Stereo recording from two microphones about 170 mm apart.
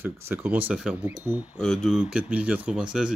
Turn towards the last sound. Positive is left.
turn(degrees=-5)  # may be behind; listen again after turning